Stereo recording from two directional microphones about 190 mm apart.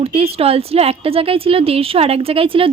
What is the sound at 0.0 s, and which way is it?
Speech, 30° right (ahead or behind).